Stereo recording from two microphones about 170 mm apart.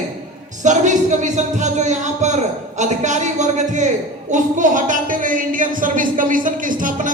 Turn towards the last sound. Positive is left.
turn(degrees=-50)  # may be behind; listen again after turning